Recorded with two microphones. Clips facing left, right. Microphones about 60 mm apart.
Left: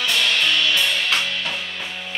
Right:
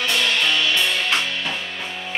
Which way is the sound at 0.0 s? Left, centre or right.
Centre.